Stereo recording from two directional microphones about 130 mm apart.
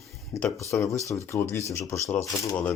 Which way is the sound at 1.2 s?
20° left (ahead or behind).